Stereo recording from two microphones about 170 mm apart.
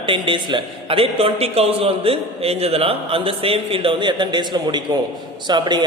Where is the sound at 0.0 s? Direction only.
30° right (ahead or behind).